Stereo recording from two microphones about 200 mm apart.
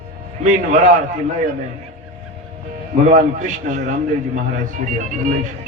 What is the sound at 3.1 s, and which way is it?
A man's voice, 40° right (ahead or behind).